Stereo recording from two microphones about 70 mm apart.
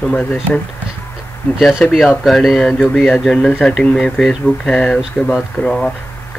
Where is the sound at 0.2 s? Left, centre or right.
Left.